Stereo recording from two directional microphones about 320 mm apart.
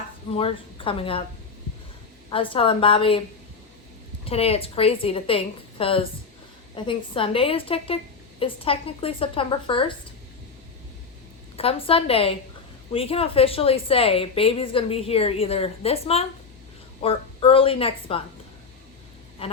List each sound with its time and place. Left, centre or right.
0.3 s a woman's voice: centre
2.3 s a woman's voice: centre
4.3 s a woman's voice: centre
11.5 s a woman's voice: centre
19.4 s quack: centre